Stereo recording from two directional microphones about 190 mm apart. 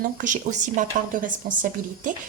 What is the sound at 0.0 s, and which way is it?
Speech, 45° right (ahead or behind).